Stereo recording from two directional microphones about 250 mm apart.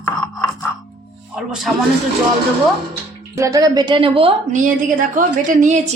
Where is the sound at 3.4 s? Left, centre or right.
Centre; by 5.8 s right.